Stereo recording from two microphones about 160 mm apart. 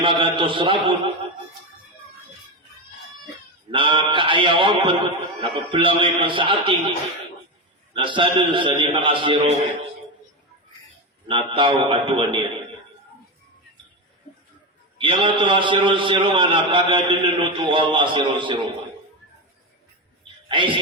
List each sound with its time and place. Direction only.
0.0 s a man's voice: 30° right (ahead or behind)
3.7 s a man's voice: 30° right (ahead or behind)
7.9 s a man's voice: 30° right (ahead or behind)
11.3 s a man's voice: 30° right (ahead or behind)
14.9 s a man's voice: 35° right (ahead or behind)
20.5 s a man's voice: 30° right (ahead or behind)